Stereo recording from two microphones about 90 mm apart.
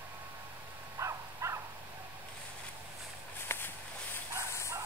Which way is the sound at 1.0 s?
35° right (ahead or behind).